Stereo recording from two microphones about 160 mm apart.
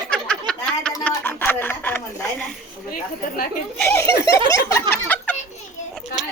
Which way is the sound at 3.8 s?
15° left (ahead or behind).